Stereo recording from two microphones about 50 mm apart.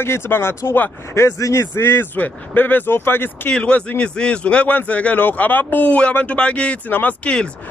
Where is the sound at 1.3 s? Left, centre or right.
Left.